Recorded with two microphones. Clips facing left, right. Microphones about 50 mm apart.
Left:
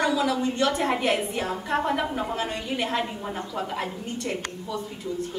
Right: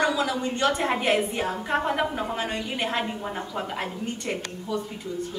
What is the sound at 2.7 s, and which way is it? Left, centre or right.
Speech, right.